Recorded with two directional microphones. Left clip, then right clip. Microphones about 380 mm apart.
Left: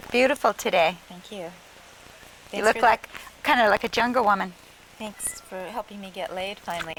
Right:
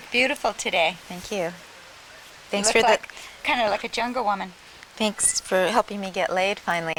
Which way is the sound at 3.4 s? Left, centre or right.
Left.